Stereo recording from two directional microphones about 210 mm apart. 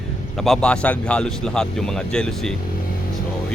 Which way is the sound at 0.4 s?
5° left (ahead or behind).